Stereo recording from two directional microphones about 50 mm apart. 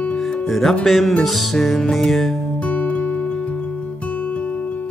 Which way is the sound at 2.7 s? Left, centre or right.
Left.